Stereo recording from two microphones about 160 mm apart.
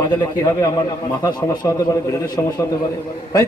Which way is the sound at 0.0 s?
20° left (ahead or behind).